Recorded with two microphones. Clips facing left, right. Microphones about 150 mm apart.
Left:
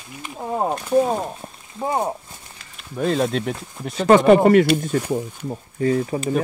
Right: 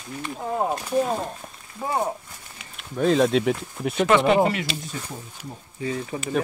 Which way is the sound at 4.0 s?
40° left (ahead or behind).